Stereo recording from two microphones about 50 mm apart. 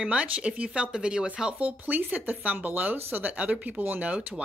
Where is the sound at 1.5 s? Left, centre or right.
Right.